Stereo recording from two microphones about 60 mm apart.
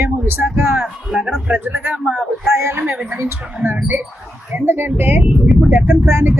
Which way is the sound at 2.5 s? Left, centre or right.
Right.